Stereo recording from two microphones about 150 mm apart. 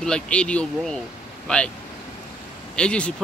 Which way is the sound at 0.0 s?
5° left (ahead or behind).